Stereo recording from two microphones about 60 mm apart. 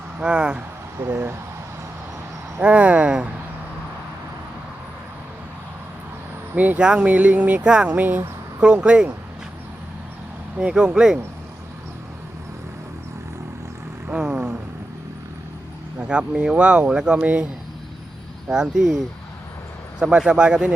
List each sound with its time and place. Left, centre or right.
0.2 s speech: centre
0.9 s speech: right
2.6 s speech: right
6.5 s speech: right
6.8 s speech: centre
7.6 s speech: centre
7.9 s speech: right
8.6 s speech: centre
10.6 s speech: centre
14.1 s vehicle: centre
16.0 s speech: centre
18.5 s speech: centre